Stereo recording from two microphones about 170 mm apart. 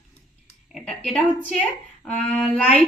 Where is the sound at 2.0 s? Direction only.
40° left (ahead or behind).